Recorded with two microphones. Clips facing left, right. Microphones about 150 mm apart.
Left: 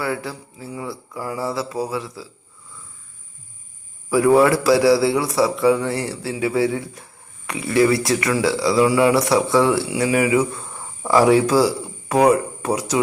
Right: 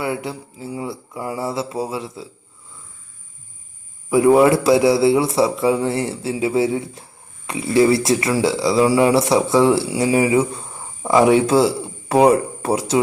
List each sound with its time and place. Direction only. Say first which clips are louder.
0.0 s a man's voice: right 1 dB; 20° right (ahead or behind)
4.1 s a man's voice: right 2 dB; 20° right (ahead or behind)